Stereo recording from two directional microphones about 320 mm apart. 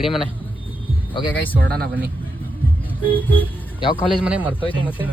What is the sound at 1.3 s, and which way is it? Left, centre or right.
Speech, centre.